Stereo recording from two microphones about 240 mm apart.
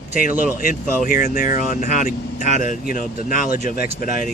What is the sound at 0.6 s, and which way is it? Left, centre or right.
Speech, left.